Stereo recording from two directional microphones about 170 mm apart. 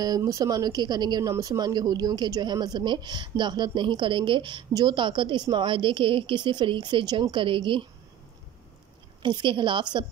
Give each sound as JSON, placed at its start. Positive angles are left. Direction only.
{"t": 0.0, "sound": "a woman's voice", "side_deg": -20}
{"t": 9.2, "sound": "a woman's voice", "side_deg": -25}